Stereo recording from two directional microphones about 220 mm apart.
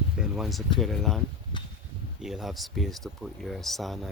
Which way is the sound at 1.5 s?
20° left (ahead or behind).